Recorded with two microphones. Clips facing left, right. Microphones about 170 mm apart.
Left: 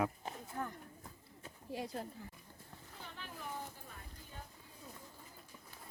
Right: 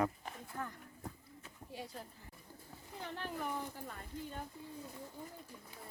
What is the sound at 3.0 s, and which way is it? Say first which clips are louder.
Speech: right 8 dB; 60° right (ahead or behind).